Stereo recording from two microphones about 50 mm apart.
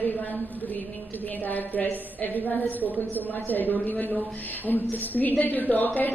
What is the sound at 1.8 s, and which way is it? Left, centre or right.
A woman's voice, left.